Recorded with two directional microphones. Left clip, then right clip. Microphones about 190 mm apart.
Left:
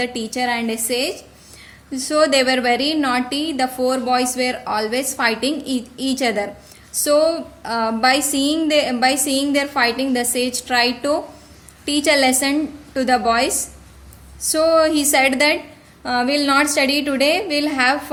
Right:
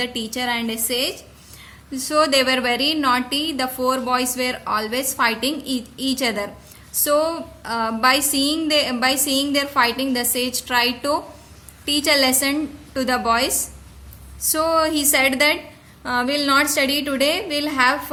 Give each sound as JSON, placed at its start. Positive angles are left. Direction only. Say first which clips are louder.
{"t": 0.0, "sound": "a woman's voice", "louder": "left 3 dB", "side_deg": 15}